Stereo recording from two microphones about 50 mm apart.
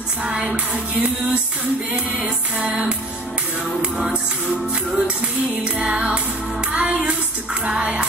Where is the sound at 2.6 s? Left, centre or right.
Centre.